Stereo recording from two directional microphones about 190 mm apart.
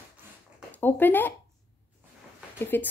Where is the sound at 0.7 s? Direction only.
10° left (ahead or behind).